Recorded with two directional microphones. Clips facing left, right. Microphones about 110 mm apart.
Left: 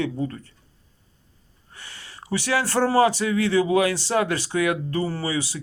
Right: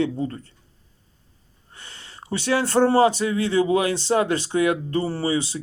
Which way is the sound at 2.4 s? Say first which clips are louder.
Right 4 dB; 20° right (ahead or behind).